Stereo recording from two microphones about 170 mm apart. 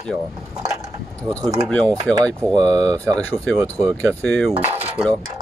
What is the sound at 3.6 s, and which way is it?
Speech, 20° right (ahead or behind).